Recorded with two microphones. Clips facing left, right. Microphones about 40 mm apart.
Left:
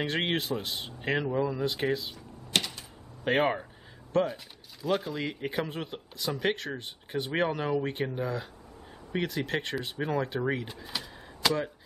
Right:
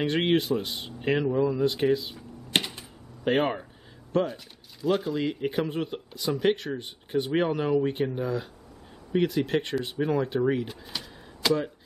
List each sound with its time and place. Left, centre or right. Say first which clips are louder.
0.0 s speech: right 5 dB; centre
2.1 s typewriter: right 2 dB; right
3.3 s speech: right 1 dB; centre